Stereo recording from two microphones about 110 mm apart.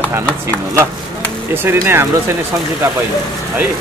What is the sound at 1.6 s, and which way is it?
Speech, 20° right (ahead or behind).